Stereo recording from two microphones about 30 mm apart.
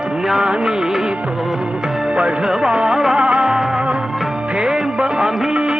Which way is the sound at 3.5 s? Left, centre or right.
Centre.